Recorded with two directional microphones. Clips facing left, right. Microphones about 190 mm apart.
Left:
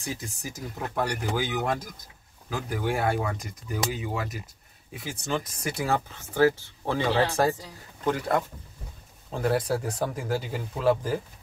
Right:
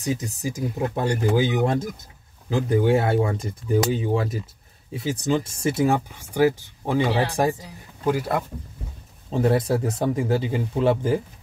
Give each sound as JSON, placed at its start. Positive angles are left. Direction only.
{"t": 0.0, "sound": "speech", "side_deg": -20}
{"t": 4.9, "sound": "speech", "side_deg": -20}
{"t": 5.9, "sound": "speech", "side_deg": -10}
{"t": 9.3, "sound": "speech", "side_deg": -25}